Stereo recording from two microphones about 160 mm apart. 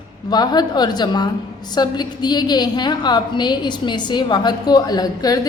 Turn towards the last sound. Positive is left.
turn(degrees=25)  # may be behind; listen again after turning